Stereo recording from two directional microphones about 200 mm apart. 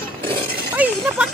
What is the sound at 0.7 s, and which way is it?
Speech, 10° right (ahead or behind).